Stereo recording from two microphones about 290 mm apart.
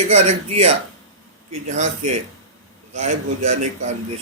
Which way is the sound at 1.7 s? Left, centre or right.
Right.